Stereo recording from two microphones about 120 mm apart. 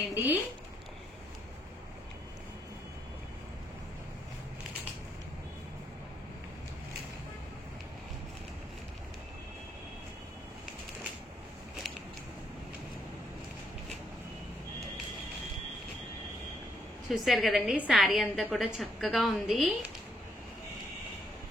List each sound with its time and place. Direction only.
0.1 s speech: 15° right (ahead or behind)
17.1 s a woman's voice: centre (ahead or behind)